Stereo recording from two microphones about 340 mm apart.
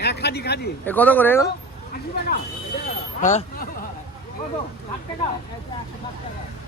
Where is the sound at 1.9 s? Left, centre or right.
Left.